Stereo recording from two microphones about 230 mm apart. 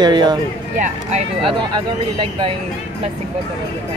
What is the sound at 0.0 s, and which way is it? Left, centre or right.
Speech, centre.